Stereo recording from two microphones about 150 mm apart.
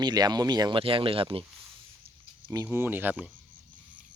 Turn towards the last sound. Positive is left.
turn(degrees=-10)  # may be behind; listen again after turning